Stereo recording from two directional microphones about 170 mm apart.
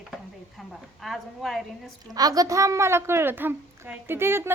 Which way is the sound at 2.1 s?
20° right (ahead or behind).